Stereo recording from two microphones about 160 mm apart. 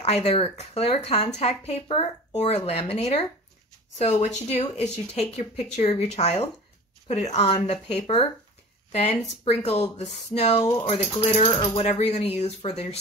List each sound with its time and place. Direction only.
0.0 s speech: 40° left (ahead or behind)